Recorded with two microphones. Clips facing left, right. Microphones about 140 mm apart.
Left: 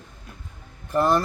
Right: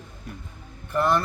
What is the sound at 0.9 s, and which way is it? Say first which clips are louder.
Speech: left 2 dB; 35° left (ahead or behind).